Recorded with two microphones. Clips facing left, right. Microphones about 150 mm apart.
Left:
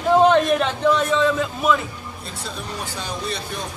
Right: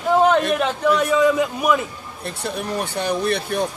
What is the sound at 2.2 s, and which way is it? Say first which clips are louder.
Speech: right 7 dB; 60° right (ahead or behind).